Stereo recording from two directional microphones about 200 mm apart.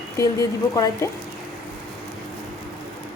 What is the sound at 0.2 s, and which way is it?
Speech, 15° left (ahead or behind).